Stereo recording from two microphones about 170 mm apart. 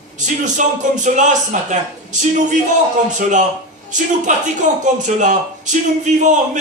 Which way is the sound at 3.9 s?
45° right (ahead or behind).